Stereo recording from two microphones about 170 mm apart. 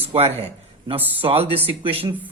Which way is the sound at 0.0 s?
35° right (ahead or behind).